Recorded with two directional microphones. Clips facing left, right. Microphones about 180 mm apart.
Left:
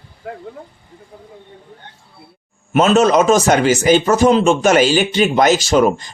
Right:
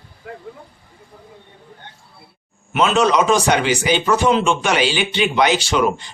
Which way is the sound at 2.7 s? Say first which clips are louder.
Left 4 dB; 45° left (ahead or behind).